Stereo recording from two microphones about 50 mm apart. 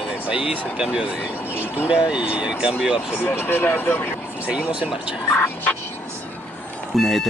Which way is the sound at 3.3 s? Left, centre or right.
Left.